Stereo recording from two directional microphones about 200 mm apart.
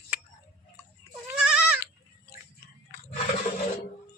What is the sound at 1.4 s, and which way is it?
Goat, 5° right (ahead or behind).